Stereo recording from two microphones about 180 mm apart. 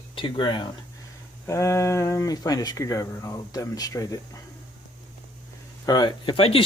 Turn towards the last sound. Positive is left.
turn(degrees=30)  # may be behind; listen again after turning